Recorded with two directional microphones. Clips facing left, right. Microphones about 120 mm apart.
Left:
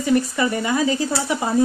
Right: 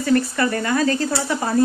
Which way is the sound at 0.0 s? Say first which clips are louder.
Even; 15° left (ahead or behind).